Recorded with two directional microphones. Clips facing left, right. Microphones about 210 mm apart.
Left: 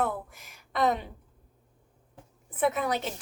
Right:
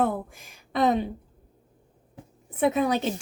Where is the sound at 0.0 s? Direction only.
30° right (ahead or behind).